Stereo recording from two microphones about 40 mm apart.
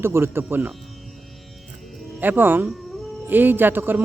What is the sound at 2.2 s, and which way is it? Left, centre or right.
A man's voice, right.